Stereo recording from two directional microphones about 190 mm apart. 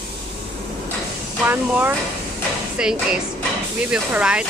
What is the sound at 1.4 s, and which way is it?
Speech, 10° right (ahead or behind).